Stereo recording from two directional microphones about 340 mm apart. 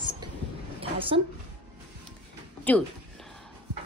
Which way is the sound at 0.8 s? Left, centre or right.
Centre.